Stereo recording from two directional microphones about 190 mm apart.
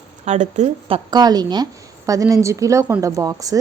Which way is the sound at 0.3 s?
40° right (ahead or behind).